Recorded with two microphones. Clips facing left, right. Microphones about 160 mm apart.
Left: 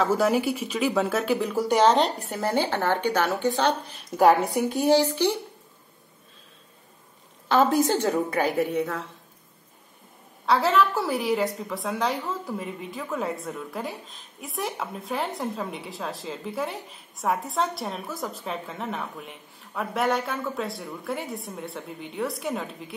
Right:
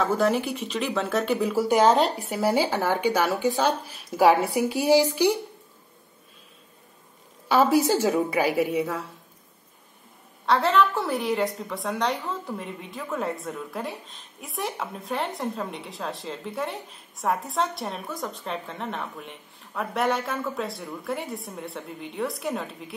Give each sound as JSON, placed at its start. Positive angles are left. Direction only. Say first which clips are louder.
{"t": 0.0, "sound": "a woman's voice", "louder": "left 1 dB", "side_deg": 10}
{"t": 7.4, "sound": "a woman's voice", "louder": "right 1 dB", "side_deg": -10}
{"t": 10.4, "sound": "a woman's voice", "louder": "even", "side_deg": 0}